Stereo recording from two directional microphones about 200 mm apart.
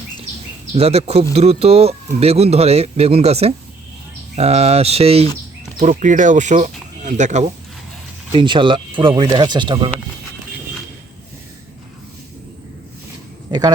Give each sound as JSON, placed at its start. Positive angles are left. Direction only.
{"t": 0.7, "sound": "speech", "side_deg": -30}
{"t": 8.3, "sound": "speech", "side_deg": -25}
{"t": 13.5, "sound": "speech", "side_deg": -20}